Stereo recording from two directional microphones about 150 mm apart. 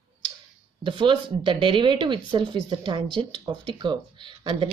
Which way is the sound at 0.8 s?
35° right (ahead or behind).